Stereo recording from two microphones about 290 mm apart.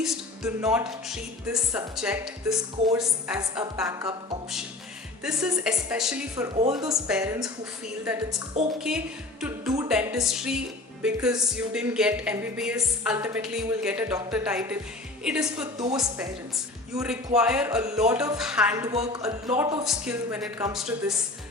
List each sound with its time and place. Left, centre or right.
0.0 s speech: centre
6.6 s speech: centre